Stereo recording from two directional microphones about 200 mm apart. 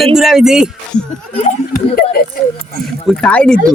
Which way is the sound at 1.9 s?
50° left (ahead or behind).